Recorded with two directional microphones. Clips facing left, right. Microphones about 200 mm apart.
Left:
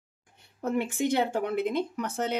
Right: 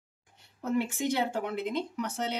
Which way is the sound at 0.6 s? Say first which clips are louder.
Left 2 dB; 55° left (ahead or behind).